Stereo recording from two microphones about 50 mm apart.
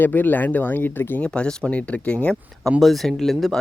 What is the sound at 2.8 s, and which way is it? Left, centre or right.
Speech, centre.